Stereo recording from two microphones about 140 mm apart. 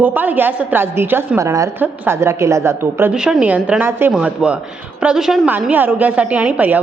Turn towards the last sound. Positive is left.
turn(degrees=-10)  # may be behind; listen again after turning